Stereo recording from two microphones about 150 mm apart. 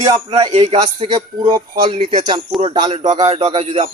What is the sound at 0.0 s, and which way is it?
A man's voice, 25° right (ahead or behind).